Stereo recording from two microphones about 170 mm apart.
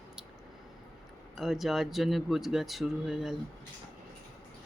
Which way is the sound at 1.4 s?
Centre (ahead or behind).